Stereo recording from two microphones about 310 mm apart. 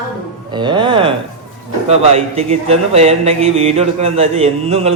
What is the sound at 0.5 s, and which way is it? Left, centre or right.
A man's voice, centre.